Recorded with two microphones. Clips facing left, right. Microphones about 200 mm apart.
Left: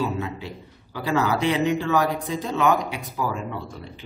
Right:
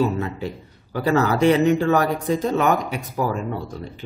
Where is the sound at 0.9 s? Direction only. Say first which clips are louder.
Right 4 dB; 45° right (ahead or behind).